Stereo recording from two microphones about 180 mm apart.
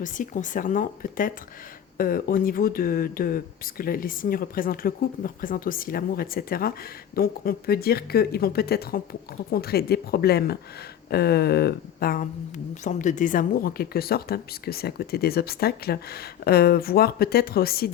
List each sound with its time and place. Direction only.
0.0 s speech: 45° left (ahead or behind)
12.8 s speech: 45° left (ahead or behind)